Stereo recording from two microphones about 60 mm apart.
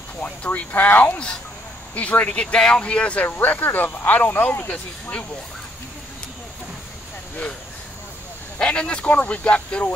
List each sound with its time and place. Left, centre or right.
0.2 s speech: left
3.3 s speech: left
8.5 s speech: centre